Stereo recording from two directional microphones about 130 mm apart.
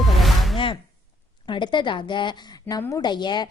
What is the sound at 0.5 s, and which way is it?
A woman's voice, 40° left (ahead or behind).